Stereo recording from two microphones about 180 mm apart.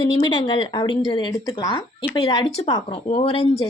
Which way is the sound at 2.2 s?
30° left (ahead or behind).